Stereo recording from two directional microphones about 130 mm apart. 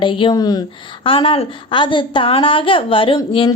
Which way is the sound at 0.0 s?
40° left (ahead or behind).